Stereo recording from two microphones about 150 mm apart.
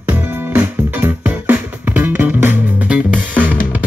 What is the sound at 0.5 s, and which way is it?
Music, 15° right (ahead or behind).